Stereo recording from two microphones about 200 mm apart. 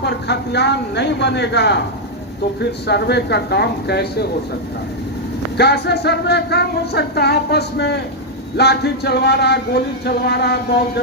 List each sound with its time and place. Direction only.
0.0 s speech: 55° left (ahead or behind)
5.5 s speech: 55° left (ahead or behind)